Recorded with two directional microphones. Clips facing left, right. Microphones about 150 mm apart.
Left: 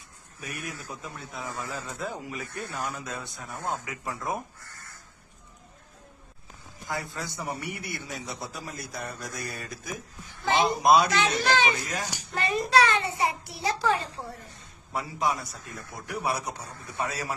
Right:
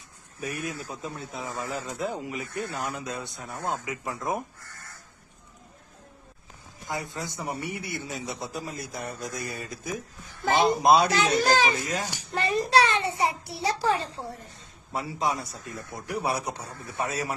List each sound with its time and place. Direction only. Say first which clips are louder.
0.4 s a man's voice: right 5 dB; 30° right (ahead or behind)
6.8 s a man's voice: right 1 dB; 20° right (ahead or behind)
10.2 s a woman's voice: right 2 dB; 45° right (ahead or behind)
10.8 s a child's voice: left 1 dB; 30° right (ahead or behind)